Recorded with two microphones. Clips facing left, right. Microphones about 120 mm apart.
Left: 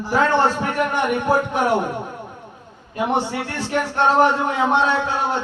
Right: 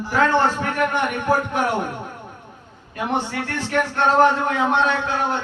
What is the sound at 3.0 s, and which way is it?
A man's voice, 15° left (ahead or behind).